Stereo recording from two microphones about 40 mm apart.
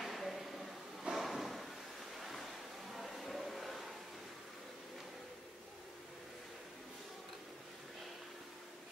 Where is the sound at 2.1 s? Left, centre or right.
Centre.